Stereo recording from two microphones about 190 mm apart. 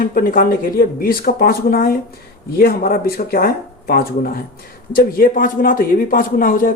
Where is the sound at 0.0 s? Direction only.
50° left (ahead or behind).